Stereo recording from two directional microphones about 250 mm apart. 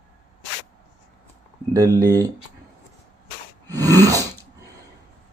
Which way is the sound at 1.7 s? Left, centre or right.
Centre.